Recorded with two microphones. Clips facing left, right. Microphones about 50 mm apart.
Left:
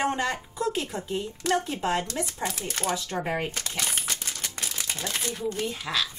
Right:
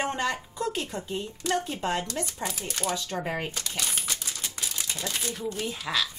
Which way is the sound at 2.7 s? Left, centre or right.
Left.